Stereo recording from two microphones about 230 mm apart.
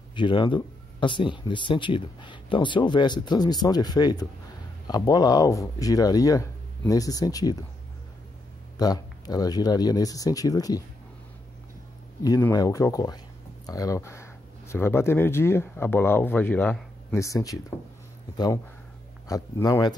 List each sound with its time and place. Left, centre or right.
0.1 s speech: left
8.7 s speech: centre
12.2 s speech: centre
19.2 s speech: centre